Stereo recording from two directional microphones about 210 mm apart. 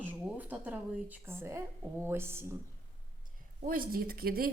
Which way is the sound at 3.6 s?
45° right (ahead or behind).